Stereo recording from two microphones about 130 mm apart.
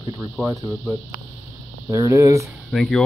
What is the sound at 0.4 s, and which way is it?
Speech, 15° right (ahead or behind).